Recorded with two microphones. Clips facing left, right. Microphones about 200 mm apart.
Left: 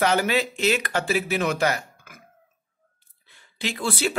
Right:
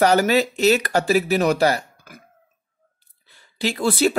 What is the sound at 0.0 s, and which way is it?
Speech, 40° right (ahead or behind).